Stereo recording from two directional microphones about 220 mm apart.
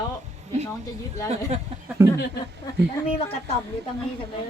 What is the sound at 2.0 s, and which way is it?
Speech, 10° right (ahead or behind).